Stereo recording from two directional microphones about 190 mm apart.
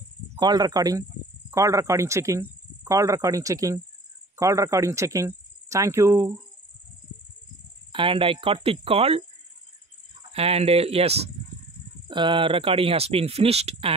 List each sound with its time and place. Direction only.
0.4 s a man's voice: 20° right (ahead or behind)
7.9 s speech: 25° right (ahead or behind)
10.3 s speech: 30° right (ahead or behind)